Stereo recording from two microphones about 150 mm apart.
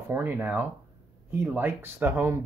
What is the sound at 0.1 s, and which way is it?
Speech, 10° right (ahead or behind).